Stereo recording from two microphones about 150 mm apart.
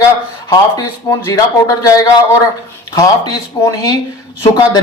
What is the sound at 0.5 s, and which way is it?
Speech, 25° left (ahead or behind).